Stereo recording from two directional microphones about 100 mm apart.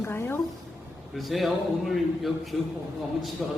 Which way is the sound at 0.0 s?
20° left (ahead or behind).